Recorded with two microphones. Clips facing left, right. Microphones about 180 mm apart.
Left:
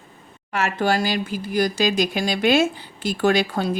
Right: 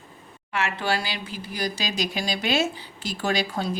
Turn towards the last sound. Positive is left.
turn(degrees=60)  # may be behind; listen again after turning